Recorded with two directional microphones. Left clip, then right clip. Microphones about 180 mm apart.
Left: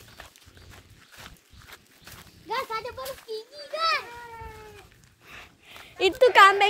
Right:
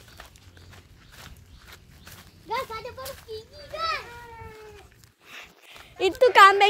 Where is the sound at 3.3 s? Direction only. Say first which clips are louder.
Left 4 dB; 40° left (ahead or behind).